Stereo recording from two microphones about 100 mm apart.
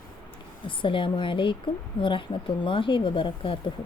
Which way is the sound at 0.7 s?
55° left (ahead or behind).